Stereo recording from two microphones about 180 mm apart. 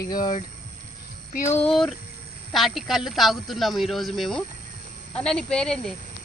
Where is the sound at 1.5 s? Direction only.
5° left (ahead or behind).